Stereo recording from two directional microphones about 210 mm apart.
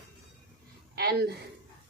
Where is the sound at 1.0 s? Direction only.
50° right (ahead or behind).